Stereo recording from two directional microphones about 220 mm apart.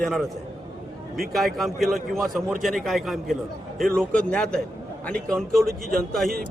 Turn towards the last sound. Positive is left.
turn(degrees=0)  # may be behind; listen again after turning